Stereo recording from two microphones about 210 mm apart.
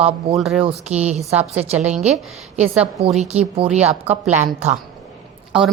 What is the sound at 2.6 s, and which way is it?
Speech, 5° right (ahead or behind).